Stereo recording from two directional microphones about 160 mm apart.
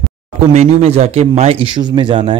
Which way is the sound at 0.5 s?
40° right (ahead or behind).